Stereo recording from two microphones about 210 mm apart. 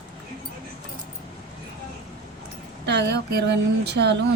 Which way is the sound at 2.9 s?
55° right (ahead or behind).